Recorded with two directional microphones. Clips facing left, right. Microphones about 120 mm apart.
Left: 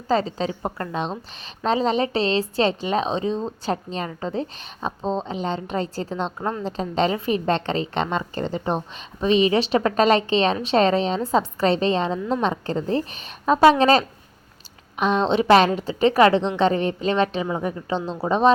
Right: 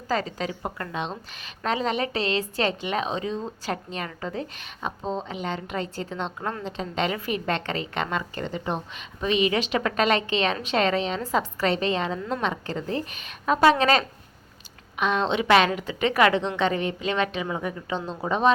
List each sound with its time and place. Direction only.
0.1 s a woman's voice: 30° left (ahead or behind)